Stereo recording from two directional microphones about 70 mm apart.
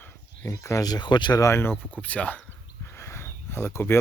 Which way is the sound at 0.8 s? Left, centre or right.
Left.